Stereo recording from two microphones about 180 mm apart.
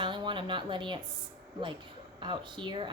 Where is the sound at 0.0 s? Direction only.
25° right (ahead or behind).